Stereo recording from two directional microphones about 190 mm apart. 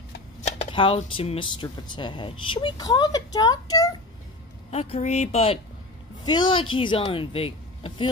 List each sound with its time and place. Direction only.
0.4 s speech: 35° left (ahead or behind)
4.6 s speech: 30° left (ahead or behind)